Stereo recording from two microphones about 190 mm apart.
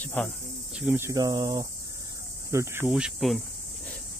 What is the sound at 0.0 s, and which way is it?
Speech, 10° left (ahead or behind).